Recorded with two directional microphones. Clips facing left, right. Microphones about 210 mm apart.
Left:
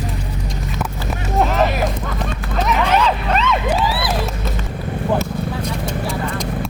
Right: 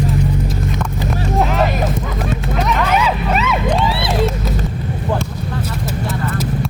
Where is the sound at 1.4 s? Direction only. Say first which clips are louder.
Left 1 dB; centre (ahead or behind).